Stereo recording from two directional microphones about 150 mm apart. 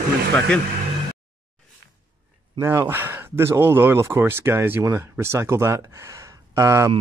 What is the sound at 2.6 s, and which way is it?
Speech, 15° right (ahead or behind).